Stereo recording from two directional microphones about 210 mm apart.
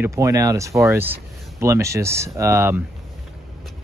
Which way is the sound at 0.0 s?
15° right (ahead or behind).